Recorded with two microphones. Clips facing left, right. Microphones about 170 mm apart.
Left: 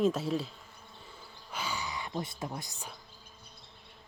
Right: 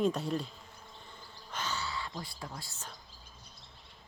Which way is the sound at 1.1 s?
10° left (ahead or behind).